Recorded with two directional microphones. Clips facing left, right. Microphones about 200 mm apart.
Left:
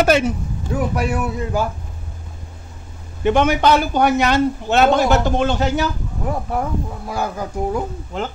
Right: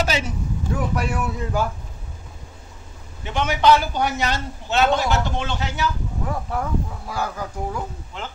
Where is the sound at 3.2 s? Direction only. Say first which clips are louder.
Left 4 dB; 55° left (ahead or behind).